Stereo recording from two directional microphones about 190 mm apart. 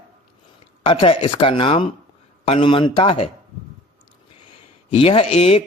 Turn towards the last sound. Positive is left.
turn(degrees=30)  # may be behind; listen again after turning